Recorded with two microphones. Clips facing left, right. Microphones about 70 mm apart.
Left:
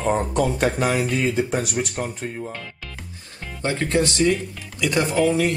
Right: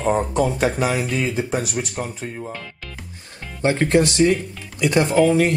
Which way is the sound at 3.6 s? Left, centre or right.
Right.